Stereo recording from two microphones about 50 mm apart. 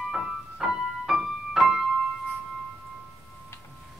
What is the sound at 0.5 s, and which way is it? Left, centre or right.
Keyboard, centre.